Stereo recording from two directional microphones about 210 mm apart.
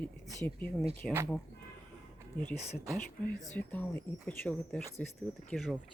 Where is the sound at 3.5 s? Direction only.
10° left (ahead or behind).